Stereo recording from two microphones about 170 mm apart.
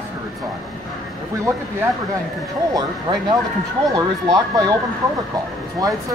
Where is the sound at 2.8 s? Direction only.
25° right (ahead or behind).